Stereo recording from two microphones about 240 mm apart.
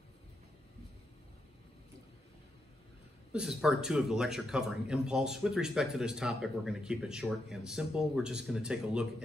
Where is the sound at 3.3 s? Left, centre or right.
Centre.